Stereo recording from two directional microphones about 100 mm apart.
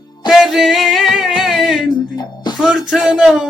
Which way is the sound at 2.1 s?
45° left (ahead or behind).